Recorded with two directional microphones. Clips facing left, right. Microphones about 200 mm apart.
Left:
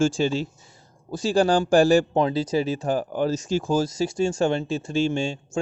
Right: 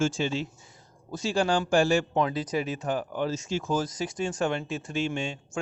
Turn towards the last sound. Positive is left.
turn(degrees=30)  # may be behind; listen again after turning